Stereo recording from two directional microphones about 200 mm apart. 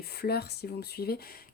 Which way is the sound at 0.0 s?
50° left (ahead or behind).